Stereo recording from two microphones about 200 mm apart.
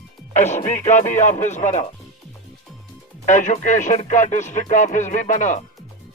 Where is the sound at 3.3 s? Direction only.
40° left (ahead or behind).